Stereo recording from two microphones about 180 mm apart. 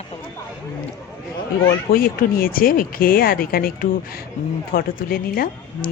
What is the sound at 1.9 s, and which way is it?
Speech, 55° left (ahead or behind).